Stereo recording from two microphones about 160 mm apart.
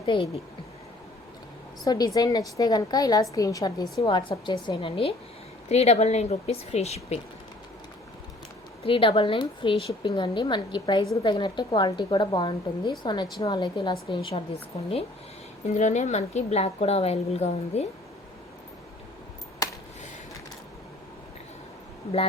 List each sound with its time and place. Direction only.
0.0 s a woman's voice: 35° left (ahead or behind)
1.8 s a woman's voice: 25° left (ahead or behind); by 7.2 s 40° left (ahead or behind)
8.8 s a woman's voice: 35° left (ahead or behind)